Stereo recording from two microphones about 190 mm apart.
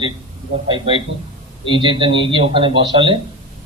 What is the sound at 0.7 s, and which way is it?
A man's voice, 25° right (ahead or behind).